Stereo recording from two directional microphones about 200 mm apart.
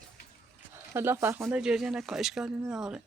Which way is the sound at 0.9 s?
10° right (ahead or behind).